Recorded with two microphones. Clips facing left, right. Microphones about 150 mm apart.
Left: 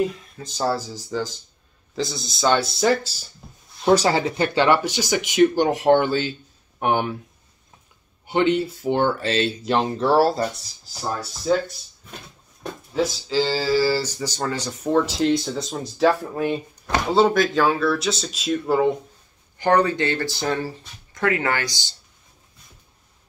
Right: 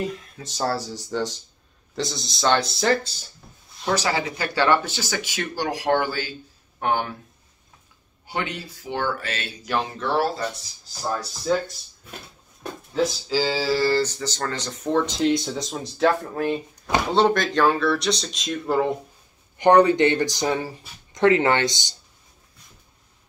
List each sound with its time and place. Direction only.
0.0 s speech: centre (ahead or behind)
3.8 s speech: 30° left (ahead or behind)
4.6 s speech: 15° left (ahead or behind)
8.3 s speech: 25° left (ahead or behind)
11.5 s speech: 5° left (ahead or behind)
12.9 s speech: centre (ahead or behind)
19.6 s speech: 20° right (ahead or behind)
21.2 s speech: 25° right (ahead or behind)